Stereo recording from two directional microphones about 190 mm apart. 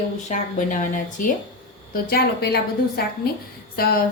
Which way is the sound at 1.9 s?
55° left (ahead or behind).